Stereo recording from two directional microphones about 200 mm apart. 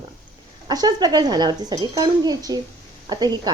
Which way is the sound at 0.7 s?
20° right (ahead or behind).